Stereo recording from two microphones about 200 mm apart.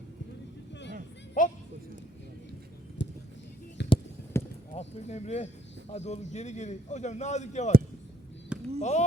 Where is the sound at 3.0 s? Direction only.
60° left (ahead or behind).